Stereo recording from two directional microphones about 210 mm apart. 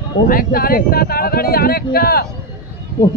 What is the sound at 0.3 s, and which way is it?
Speech, 45° left (ahead or behind).